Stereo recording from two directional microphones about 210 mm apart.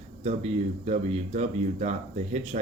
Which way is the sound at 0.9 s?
30° right (ahead or behind).